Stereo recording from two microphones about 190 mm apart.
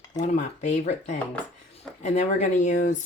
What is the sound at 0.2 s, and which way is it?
Speech, 40° left (ahead or behind).